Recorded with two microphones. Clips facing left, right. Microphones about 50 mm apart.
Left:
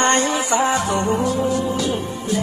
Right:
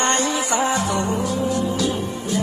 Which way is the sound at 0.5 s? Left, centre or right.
Left.